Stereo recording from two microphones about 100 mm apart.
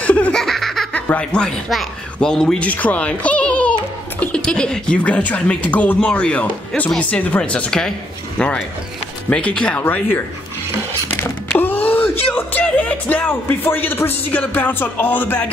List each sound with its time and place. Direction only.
0.0 s laughter: 15° left (ahead or behind)
1.0 s speech: 10° left (ahead or behind)